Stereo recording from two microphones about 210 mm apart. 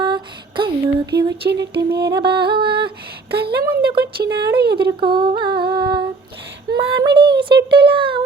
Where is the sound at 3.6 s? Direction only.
25° right (ahead or behind).